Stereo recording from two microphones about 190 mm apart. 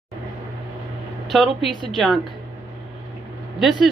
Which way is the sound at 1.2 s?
Centre (ahead or behind).